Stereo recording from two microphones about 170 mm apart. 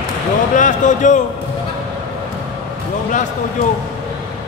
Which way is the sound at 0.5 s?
45° left (ahead or behind).